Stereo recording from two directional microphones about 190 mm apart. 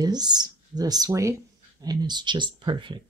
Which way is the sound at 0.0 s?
20° right (ahead or behind).